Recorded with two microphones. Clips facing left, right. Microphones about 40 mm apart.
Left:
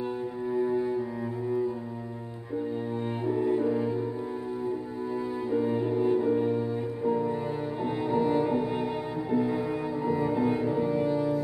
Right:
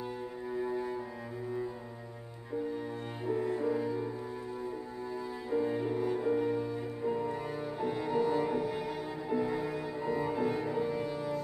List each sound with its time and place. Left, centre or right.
0.6 s cello: centre
3.3 s cello: centre
5.5 s cello: centre
7.1 s music: centre
7.8 s music: left
9.3 s cello: centre